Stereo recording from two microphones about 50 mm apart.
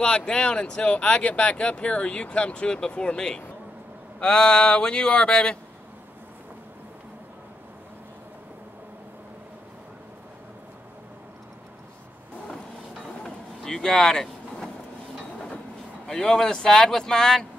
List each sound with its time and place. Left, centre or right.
0.0 s speech: centre
13.2 s vehicle: centre
16.1 s speech: centre